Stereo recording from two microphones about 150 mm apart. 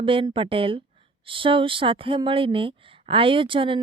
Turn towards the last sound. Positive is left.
turn(degrees=-35)  # may be behind; listen again after turning